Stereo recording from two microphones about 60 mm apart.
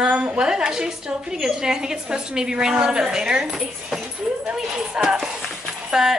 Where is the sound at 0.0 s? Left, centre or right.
Centre.